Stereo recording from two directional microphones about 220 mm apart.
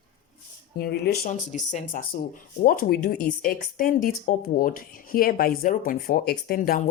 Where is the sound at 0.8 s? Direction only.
45° left (ahead or behind).